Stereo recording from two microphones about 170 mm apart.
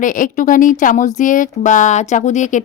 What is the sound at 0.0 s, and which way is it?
A woman's voice, 50° left (ahead or behind).